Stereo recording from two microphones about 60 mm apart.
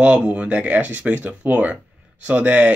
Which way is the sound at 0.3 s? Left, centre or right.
Right.